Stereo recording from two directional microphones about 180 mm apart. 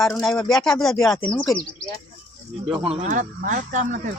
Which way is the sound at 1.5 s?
25° left (ahead or behind).